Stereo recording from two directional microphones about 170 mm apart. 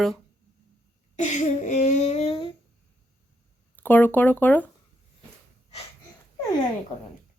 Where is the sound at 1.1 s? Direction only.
45° left (ahead or behind).